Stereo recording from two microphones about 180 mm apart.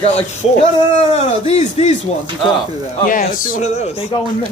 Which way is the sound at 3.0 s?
50° left (ahead or behind).